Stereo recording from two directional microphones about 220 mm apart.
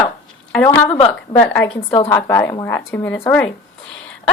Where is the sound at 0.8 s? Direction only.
25° left (ahead or behind).